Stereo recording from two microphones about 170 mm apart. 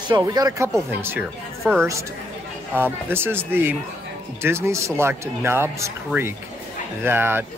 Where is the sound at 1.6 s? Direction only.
10° right (ahead or behind).